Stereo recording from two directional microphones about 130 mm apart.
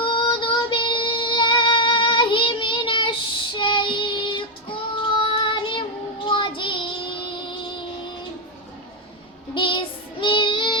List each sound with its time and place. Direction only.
0.0 s child singing: 40° left (ahead or behind)
9.6 s child singing: 40° left (ahead or behind)